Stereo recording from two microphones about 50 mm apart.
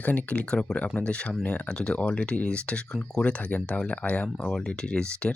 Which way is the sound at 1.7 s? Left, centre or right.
Centre.